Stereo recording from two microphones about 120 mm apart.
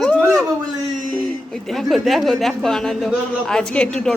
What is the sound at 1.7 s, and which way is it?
Speech, centre (ahead or behind).